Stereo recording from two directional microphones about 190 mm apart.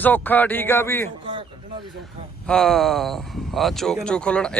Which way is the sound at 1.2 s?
25° right (ahead or behind).